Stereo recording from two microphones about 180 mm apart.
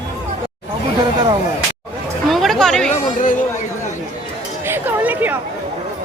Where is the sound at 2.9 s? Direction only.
45° left (ahead or behind).